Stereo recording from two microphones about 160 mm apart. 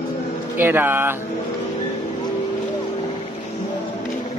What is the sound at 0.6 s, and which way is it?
Speech, 15° right (ahead or behind).